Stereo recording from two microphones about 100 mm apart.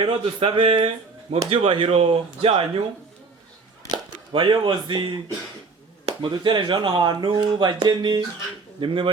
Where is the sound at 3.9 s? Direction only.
55° right (ahead or behind).